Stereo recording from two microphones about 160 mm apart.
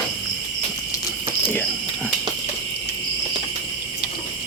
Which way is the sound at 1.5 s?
10° left (ahead or behind).